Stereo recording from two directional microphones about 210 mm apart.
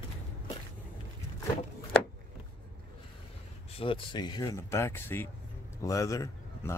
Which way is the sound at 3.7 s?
25° left (ahead or behind).